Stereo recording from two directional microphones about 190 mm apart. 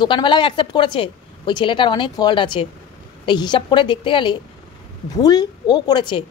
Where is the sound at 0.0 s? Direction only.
25° left (ahead or behind).